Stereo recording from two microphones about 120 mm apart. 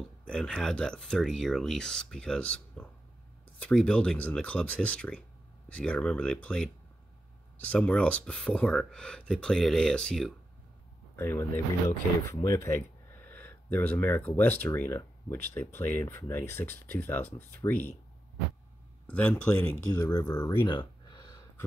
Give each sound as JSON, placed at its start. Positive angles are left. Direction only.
{"t": 0.3, "sound": "speech", "side_deg": 5}
{"t": 11.1, "sound": "speech", "side_deg": 20}
{"t": 19.0, "sound": "speech", "side_deg": 10}
{"t": 19.9, "sound": "speech", "side_deg": 35}